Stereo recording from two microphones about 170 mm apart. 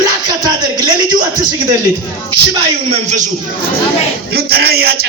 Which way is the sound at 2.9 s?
45° right (ahead or behind).